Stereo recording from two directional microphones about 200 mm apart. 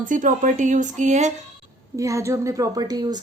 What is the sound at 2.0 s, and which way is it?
Speech, 15° right (ahead or behind).